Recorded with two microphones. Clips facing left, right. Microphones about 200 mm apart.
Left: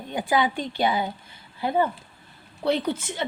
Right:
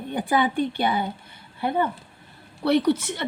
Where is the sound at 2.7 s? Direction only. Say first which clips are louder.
Right 4 dB; 65° right (ahead or behind).